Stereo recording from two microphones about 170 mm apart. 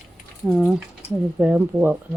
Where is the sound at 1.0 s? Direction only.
40° left (ahead or behind).